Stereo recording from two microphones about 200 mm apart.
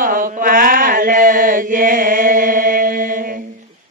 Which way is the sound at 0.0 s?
45° right (ahead or behind).